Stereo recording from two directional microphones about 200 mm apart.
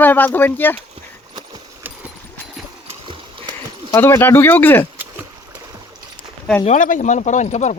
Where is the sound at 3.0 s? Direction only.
25° right (ahead or behind).